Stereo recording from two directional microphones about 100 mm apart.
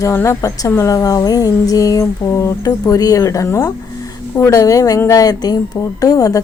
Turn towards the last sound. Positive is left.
turn(degrees=35)  # may be behind; listen again after turning